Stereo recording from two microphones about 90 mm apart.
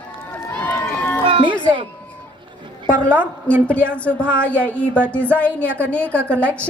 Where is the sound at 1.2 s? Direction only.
75° right (ahead or behind).